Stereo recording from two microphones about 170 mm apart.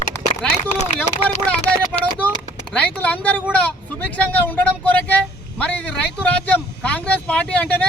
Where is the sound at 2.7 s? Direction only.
10° left (ahead or behind).